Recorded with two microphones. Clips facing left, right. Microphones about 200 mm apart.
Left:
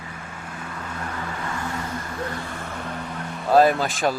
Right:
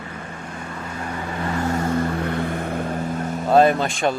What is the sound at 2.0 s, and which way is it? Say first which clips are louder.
Vehicle: right 8 dB; 60° right (ahead or behind).